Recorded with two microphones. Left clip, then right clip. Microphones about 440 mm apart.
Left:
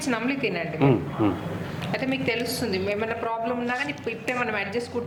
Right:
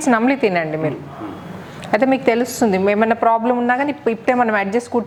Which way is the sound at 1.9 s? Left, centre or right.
Right.